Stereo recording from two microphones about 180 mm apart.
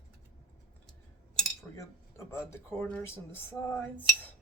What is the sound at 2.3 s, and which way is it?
Speech, 15° left (ahead or behind).